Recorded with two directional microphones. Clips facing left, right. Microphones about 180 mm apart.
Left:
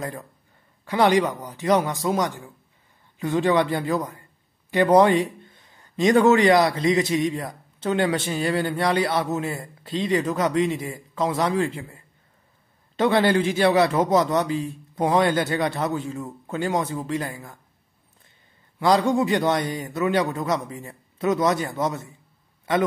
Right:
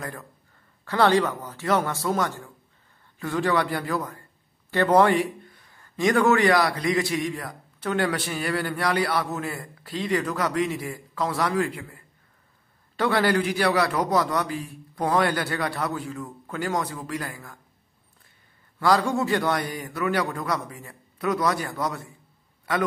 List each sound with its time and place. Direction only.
0.8 s speech: 15° left (ahead or behind)
18.8 s speech: 20° left (ahead or behind)